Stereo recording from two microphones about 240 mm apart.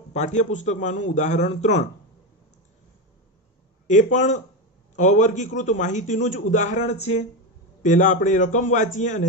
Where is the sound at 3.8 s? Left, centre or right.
Left.